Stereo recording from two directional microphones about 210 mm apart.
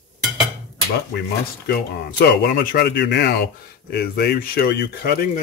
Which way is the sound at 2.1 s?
45° left (ahead or behind).